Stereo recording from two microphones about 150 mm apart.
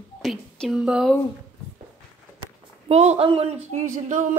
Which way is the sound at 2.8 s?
45° right (ahead or behind).